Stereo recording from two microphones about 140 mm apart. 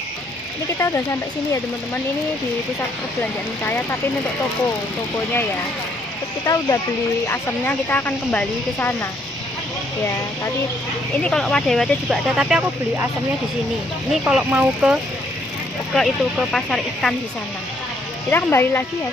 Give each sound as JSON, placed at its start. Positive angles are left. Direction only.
{"t": 3.6, "sound": "speech", "side_deg": 15}
{"t": 5.1, "sound": "speech", "side_deg": 15}
{"t": 11.2, "sound": "speech", "side_deg": 5}
{"t": 14.2, "sound": "speech", "side_deg": -10}
{"t": 15.9, "sound": "speech", "side_deg": 0}
{"t": 18.3, "sound": "speech", "side_deg": 15}